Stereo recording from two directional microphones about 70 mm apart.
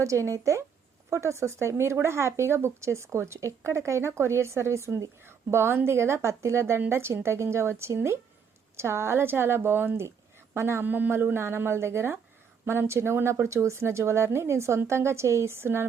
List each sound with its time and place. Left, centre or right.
0.0 s speech: right